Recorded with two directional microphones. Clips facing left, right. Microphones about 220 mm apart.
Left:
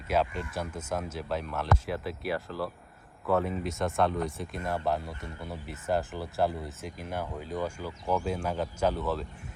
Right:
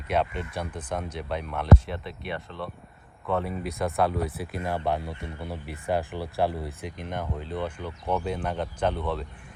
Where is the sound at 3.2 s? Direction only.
40° left (ahead or behind).